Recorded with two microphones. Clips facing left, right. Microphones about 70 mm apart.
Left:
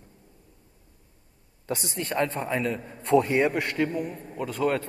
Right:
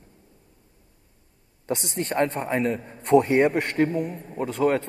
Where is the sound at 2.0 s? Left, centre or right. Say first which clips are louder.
Right 3 dB; right.